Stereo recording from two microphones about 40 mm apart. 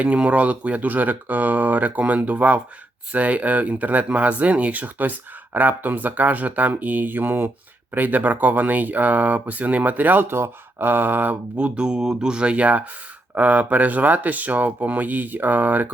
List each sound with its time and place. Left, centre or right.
0.0 s speech: right
10.2 s speech: right
10.8 s a sound: right
11.5 s speech: right